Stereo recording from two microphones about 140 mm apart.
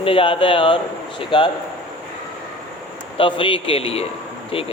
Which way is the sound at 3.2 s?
40° left (ahead or behind).